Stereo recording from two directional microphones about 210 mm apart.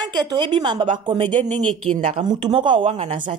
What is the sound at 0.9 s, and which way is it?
Speech, 20° right (ahead or behind).